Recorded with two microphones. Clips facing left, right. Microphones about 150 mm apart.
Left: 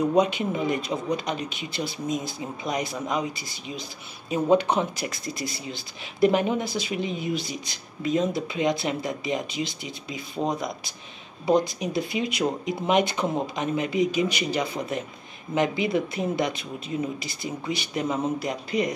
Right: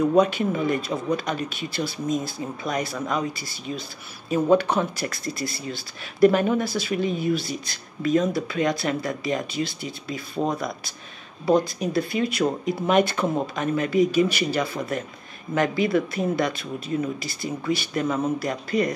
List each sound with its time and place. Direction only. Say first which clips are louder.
0.0 s speech: right 3 dB; 20° left (ahead or behind)